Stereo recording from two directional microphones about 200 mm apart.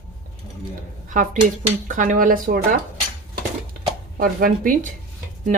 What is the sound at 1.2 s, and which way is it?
A woman's voice, 40° right (ahead or behind).